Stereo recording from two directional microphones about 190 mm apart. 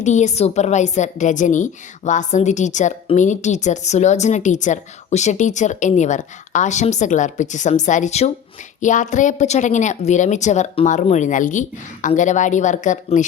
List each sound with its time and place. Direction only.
0.0 s a woman's voice: 40° left (ahead or behind)